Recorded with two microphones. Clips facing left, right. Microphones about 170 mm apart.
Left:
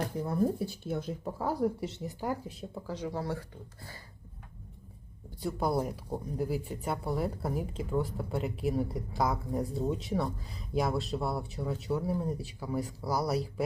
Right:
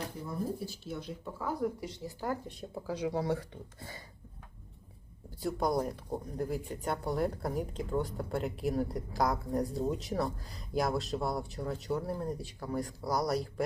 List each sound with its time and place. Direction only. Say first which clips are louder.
0.3 s speech: left 7 dB; 55° left (ahead or behind)
1.2 s speech: left 2 dB; 35° left (ahead or behind); by 2.4 s 15° left (ahead or behind)
2.5 s speech: even; centre (ahead or behind)
2.8 s speech: right 3 dB; 10° right (ahead or behind)
3.8 s a sound: right 2 dB; 20° right (ahead or behind)
5.4 s speech: even; centre (ahead or behind)